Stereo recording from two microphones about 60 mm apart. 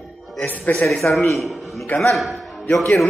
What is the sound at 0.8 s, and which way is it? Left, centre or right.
A man's voice, centre.